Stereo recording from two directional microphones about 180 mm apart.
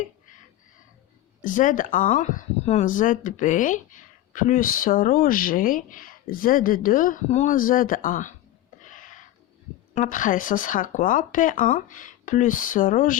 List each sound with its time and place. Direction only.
1.4 s speech: 45° left (ahead or behind)
8.8 s a sound: 45° left (ahead or behind)
9.9 s speech: 45° left (ahead or behind)